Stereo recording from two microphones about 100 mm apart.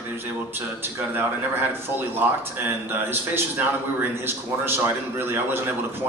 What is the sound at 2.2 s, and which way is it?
A man's voice, 15° right (ahead or behind).